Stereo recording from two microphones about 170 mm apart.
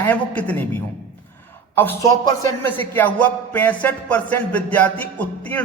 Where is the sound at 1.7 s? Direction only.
10° left (ahead or behind).